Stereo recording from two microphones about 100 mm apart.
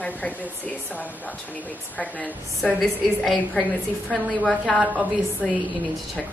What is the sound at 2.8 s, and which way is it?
A woman's voice, centre (ahead or behind).